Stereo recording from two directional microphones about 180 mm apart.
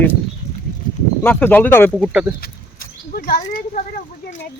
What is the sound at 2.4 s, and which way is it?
Speech, 50° left (ahead or behind).